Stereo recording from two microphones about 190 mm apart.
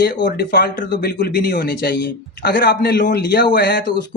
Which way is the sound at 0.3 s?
55° left (ahead or behind).